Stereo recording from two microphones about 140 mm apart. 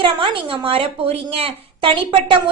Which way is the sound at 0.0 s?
40° right (ahead or behind).